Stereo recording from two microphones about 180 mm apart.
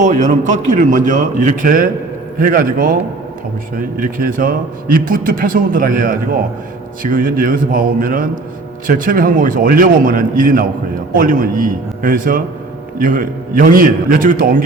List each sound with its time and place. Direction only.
0.0 s a man's voice: 45° right (ahead or behind)